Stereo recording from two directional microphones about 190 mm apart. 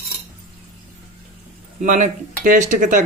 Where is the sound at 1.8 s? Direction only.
40° right (ahead or behind).